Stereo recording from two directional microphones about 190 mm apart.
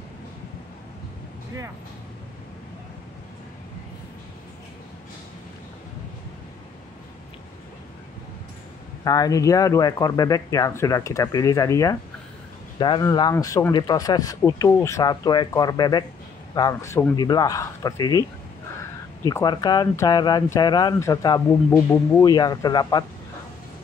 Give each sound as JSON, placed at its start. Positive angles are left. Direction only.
{"t": 9.0, "sound": "speech", "side_deg": 20}
{"t": 19.2, "sound": "speech", "side_deg": 20}
{"t": 22.2, "sound": "speech", "side_deg": 20}